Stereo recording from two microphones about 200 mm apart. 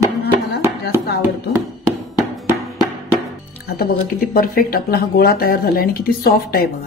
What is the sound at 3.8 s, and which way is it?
Speech, 50° left (ahead or behind).